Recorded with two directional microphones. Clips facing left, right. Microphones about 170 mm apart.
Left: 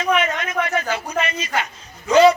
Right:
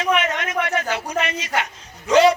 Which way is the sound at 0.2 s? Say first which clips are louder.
Left 1 dB; 75° right (ahead or behind).